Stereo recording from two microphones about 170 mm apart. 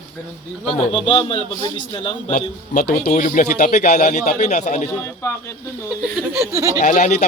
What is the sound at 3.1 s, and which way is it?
Speech, 50° left (ahead or behind).